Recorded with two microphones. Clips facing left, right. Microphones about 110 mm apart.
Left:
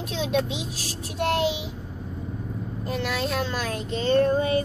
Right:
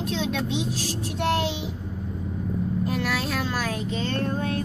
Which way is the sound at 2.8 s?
5° right (ahead or behind).